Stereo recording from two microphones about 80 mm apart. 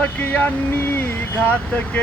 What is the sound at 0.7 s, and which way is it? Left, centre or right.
Speech, left.